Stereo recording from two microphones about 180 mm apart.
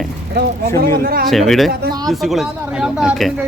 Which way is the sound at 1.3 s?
Centre (ahead or behind).